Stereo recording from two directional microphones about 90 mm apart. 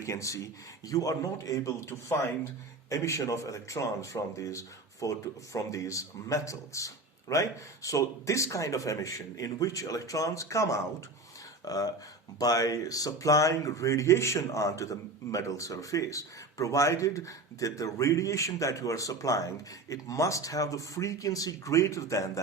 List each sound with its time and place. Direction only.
0.0 s speech: 35° left (ahead or behind)